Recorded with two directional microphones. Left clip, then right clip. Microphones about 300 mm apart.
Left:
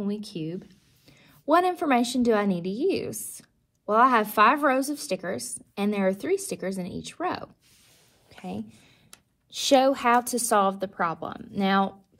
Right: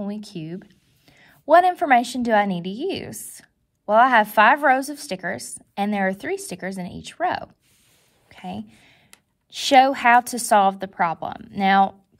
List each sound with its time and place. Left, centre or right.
0.0 s a woman's voice: right
8.3 s a sound: right
9.5 s a woman's voice: right